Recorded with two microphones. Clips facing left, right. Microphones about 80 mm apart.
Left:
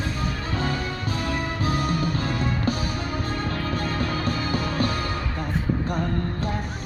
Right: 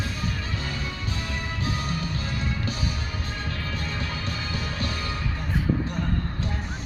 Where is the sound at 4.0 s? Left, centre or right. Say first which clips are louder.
Left 6 dB; left.